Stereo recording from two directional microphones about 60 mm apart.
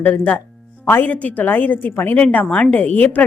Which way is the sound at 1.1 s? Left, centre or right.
Left.